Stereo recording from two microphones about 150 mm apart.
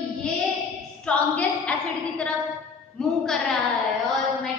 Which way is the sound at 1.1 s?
5° left (ahead or behind).